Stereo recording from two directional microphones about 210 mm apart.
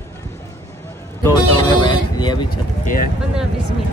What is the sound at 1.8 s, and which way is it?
Vehicle, 20° left (ahead or behind).